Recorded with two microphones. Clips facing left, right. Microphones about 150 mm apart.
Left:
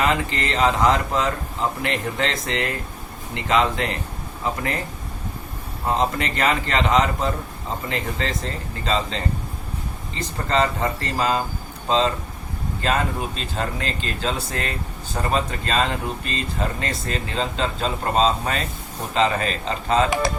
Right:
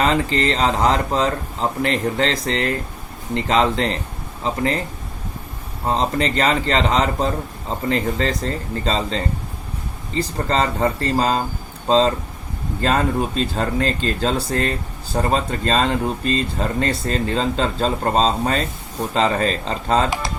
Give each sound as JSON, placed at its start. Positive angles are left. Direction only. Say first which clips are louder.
{"t": 0.0, "sound": "speech", "louder": "right 4 dB", "side_deg": -35}
{"t": 5.9, "sound": "speech", "louder": "right 2 dB", "side_deg": -30}